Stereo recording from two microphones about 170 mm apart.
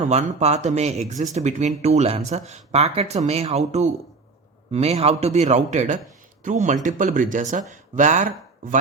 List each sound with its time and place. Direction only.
0.1 s a man's voice: 40° right (ahead or behind)